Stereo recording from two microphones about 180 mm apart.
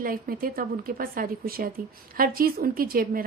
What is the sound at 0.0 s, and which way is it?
A woman's voice, 55° right (ahead or behind).